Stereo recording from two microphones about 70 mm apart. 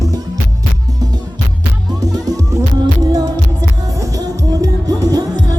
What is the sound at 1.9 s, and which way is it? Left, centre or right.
Music, right.